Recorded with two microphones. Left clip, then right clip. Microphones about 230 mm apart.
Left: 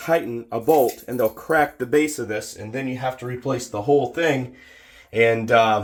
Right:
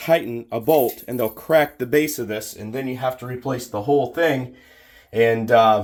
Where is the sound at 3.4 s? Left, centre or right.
Centre.